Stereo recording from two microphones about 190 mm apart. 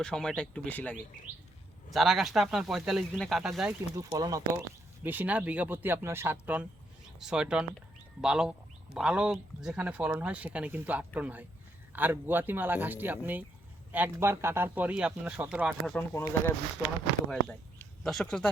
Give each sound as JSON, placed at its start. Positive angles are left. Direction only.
{"t": 0.0, "sound": "speech", "side_deg": 5}
{"t": 4.1, "sound": "speech", "side_deg": -20}
{"t": 16.0, "sound": "speech", "side_deg": 10}
{"t": 18.0, "sound": "speech", "side_deg": 0}